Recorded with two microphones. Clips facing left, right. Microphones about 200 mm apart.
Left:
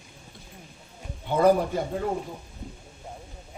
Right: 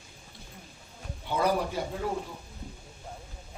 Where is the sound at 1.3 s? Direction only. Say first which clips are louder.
Left 7 dB; 50° left (ahead or behind).